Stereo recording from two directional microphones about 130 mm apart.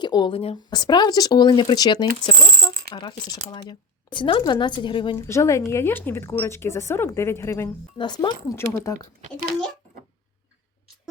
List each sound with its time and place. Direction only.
0.0 s speech: 35° left (ahead or behind)
0.7 s speech: 35° left (ahead or behind)
5.1 s speech: 20° left (ahead or behind)
7.9 s speech: 35° left (ahead or behind)